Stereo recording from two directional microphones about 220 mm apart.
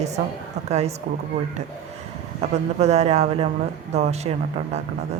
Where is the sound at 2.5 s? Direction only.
30° right (ahead or behind).